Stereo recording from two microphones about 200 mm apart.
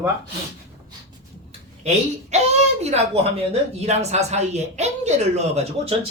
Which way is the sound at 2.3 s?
35° right (ahead or behind).